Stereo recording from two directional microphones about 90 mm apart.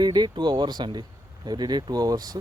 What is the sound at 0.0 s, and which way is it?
Speech, 50° right (ahead or behind).